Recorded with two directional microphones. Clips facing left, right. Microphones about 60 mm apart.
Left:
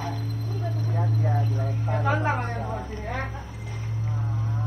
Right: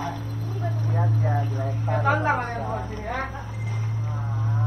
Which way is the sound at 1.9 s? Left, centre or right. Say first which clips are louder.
Right 3 dB; right.